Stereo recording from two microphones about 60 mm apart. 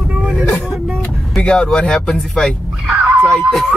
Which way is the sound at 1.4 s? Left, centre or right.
Centre.